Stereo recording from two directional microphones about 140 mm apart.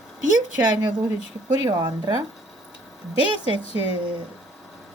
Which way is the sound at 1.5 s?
30° right (ahead or behind).